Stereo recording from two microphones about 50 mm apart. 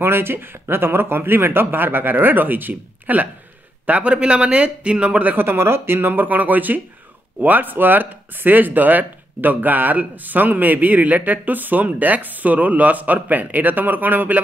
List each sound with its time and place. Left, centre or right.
0.0 s a man's voice: right
5.3 s speech: right